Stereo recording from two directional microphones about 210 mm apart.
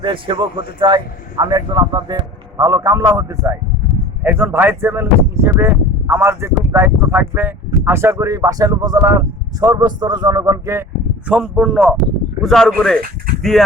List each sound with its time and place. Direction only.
0.0 s speech: 25° right (ahead or behind)
11.3 s speech: 5° right (ahead or behind)